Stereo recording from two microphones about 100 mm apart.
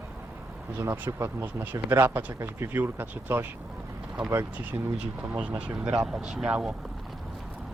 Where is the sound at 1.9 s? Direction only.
20° right (ahead or behind).